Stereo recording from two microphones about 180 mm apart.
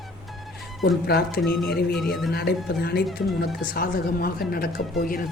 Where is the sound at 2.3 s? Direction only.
60° left (ahead or behind).